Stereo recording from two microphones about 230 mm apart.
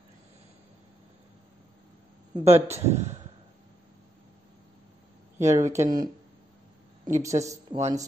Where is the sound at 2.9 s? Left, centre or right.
Right.